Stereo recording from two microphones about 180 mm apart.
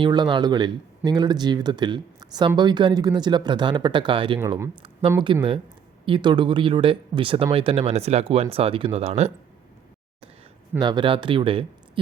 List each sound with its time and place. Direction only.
0.0 s speech: 25° right (ahead or behind)
10.8 s speech: 25° right (ahead or behind)